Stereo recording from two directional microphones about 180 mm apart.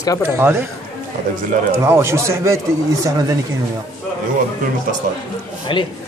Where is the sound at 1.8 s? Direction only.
15° right (ahead or behind).